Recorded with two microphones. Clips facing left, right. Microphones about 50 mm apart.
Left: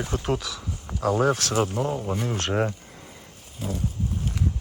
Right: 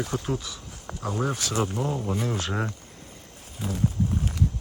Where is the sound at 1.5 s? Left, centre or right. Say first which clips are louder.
Left 3 dB; centre.